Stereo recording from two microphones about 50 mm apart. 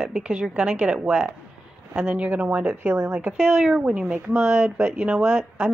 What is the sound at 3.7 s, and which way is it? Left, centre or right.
Speech, right.